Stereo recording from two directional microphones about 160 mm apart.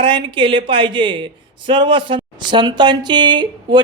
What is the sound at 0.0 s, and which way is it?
Speech, 30° right (ahead or behind).